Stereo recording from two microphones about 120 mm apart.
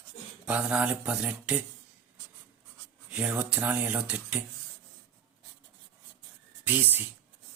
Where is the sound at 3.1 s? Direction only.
10° right (ahead or behind).